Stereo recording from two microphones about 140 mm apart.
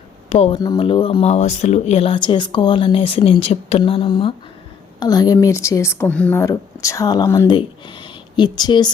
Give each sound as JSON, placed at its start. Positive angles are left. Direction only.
{"t": 0.3, "sound": "speech", "side_deg": 45}
{"t": 6.0, "sound": "speech", "side_deg": 10}
{"t": 6.4, "sound": "speech", "side_deg": 20}
{"t": 7.4, "sound": "speech", "side_deg": 35}